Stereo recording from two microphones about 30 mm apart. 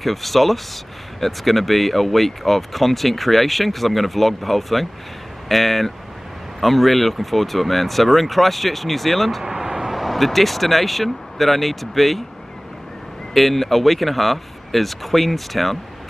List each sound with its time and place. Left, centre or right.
0.0 s speech: centre
9.4 s vehicle: centre
9.9 s speech: centre
13.3 s speech: centre